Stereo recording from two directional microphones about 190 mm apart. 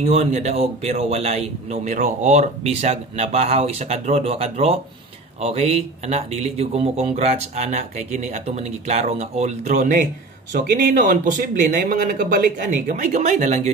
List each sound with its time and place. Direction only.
0.0 s a man's voice: 35° right (ahead or behind)